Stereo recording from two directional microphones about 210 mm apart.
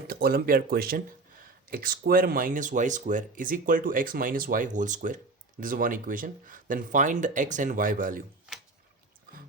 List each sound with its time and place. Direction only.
0.1 s speech: 45° right (ahead or behind)